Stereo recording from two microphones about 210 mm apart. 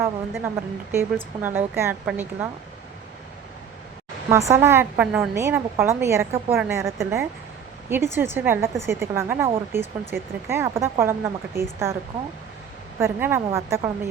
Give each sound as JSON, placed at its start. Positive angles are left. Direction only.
{"t": 0.0, "sound": "a woman's voice", "side_deg": -10}
{"t": 4.3, "sound": "a woman's voice", "side_deg": -15}
{"t": 13.0, "sound": "a woman's voice", "side_deg": -10}